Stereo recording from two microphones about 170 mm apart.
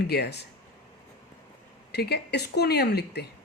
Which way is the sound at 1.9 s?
70° left (ahead or behind).